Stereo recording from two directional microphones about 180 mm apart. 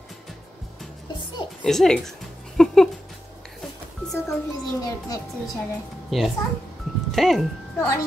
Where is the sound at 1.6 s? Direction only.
5° left (ahead or behind).